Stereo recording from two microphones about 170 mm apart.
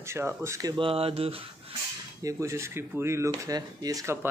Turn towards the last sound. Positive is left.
turn(degrees=-15)  # may be behind; listen again after turning